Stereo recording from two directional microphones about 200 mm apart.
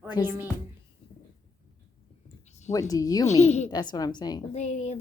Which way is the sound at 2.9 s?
20° left (ahead or behind).